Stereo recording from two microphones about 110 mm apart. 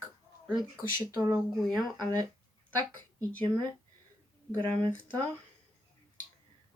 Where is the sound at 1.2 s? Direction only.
25° right (ahead or behind).